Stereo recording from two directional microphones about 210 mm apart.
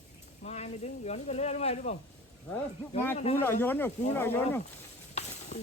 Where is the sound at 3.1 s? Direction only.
30° left (ahead or behind).